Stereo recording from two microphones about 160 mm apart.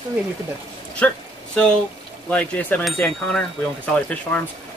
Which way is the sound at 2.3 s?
10° left (ahead or behind).